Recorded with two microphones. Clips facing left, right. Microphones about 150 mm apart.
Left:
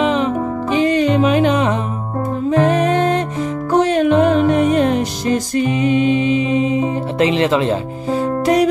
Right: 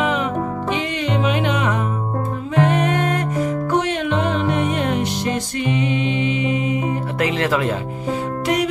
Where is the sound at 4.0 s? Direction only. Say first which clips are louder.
Left 8 dB; 45° left (ahead or behind); by 7.6 s 20° left (ahead or behind).